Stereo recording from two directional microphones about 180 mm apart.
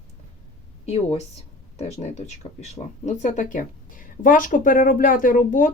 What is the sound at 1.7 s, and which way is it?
Speech, 35° left (ahead or behind).